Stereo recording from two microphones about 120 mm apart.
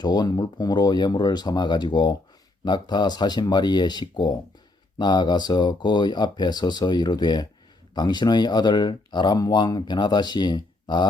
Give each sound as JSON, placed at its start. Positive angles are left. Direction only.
{"t": 0.0, "sound": "speech", "side_deg": 35}